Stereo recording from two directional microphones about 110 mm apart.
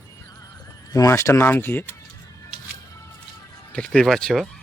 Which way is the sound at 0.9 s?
30° left (ahead or behind).